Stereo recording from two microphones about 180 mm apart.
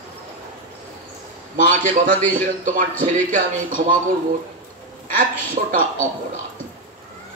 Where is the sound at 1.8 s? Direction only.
50° right (ahead or behind).